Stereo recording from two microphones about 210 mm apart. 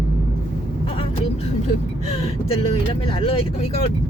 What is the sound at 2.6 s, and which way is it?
Vehicle, 25° left (ahead or behind).